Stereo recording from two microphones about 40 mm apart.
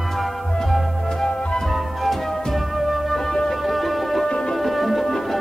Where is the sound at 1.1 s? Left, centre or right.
Centre.